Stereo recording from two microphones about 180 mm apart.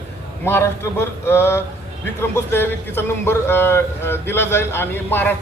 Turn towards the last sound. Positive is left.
turn(degrees=10)  # may be behind; listen again after turning